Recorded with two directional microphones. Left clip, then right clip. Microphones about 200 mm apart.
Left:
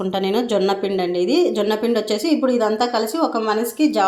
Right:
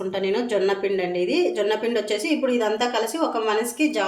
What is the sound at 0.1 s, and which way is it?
A woman's voice, 35° left (ahead or behind).